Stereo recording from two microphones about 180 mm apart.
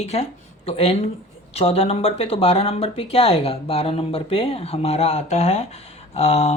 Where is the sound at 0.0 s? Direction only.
35° left (ahead or behind).